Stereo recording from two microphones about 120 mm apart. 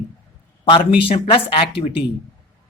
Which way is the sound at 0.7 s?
45° left (ahead or behind).